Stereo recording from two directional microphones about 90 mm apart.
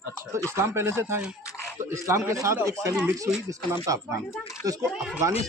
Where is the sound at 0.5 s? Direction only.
30° right (ahead or behind).